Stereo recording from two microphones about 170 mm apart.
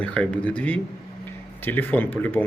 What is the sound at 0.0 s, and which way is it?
Speech, 5° left (ahead or behind).